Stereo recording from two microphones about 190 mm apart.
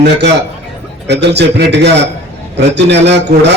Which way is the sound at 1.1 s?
65° right (ahead or behind).